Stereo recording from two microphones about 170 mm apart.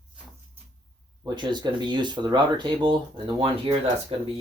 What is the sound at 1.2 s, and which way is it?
Speech, 25° right (ahead or behind).